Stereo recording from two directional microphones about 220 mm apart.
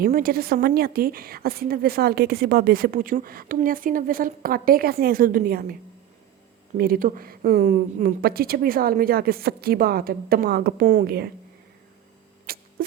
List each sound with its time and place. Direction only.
0.0 s a woman's voice: 40° right (ahead or behind)
6.7 s a woman's voice: 40° right (ahead or behind)
12.5 s a sound: 45° right (ahead or behind)